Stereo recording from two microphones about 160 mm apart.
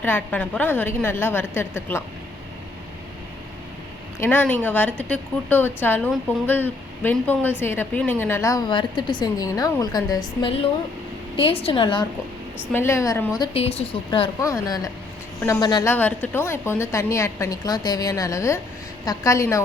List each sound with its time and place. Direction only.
0.0 s speech: 10° left (ahead or behind)
4.2 s a woman's voice: 10° left (ahead or behind)
11.3 s speech: 35° left (ahead or behind)
12.7 s speech: 15° left (ahead or behind)
13.4 s speech: 40° left (ahead or behind)
14.4 s a woman's voice: 20° left (ahead or behind)
15.9 s a woman's voice: 10° left (ahead or behind)